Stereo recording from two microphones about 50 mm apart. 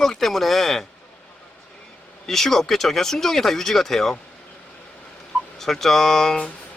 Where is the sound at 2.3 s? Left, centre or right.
Centre.